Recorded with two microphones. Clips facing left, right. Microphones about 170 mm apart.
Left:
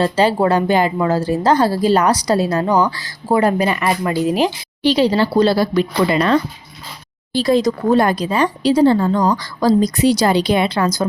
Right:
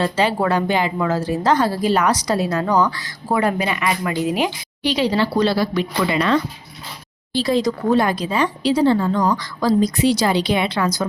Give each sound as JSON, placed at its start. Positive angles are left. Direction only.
{"t": 0.0, "sound": "a woman's voice", "side_deg": 35}
{"t": 0.9, "sound": "a woman's voice", "side_deg": 30}